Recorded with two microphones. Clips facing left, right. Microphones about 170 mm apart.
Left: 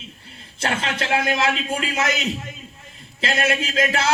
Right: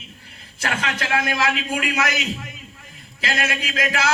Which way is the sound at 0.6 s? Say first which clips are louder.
Left 1 dB; 30° left (ahead or behind).